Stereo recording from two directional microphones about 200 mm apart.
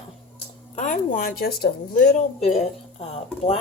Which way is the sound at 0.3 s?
40° left (ahead or behind).